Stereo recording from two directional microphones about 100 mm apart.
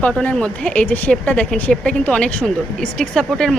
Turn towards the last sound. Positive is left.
turn(degrees=5)  # may be behind; listen again after turning